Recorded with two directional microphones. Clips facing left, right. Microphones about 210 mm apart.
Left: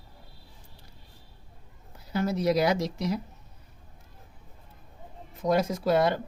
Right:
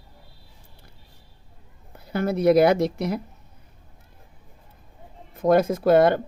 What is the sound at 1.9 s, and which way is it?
Speech, 55° right (ahead or behind).